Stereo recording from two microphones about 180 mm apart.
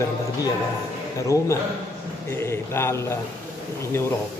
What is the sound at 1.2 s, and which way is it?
A man's voice, 15° left (ahead or behind).